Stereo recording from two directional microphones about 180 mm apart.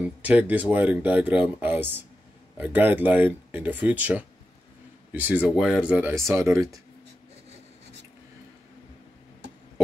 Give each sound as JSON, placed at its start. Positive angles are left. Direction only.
{"t": 0.2, "sound": "speech", "side_deg": -10}